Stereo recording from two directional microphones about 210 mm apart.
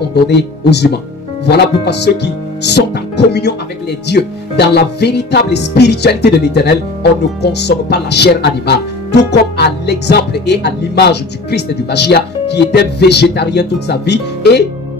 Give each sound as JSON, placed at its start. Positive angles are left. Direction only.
{"t": 0.1, "sound": "speech", "side_deg": 50}